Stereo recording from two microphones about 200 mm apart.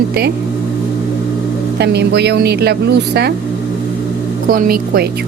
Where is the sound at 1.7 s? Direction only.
55° right (ahead or behind).